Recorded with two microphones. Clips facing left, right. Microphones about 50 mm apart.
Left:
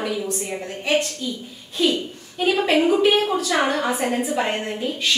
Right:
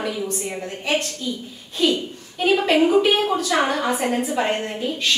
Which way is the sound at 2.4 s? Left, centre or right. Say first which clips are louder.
Right 1 dB; centre.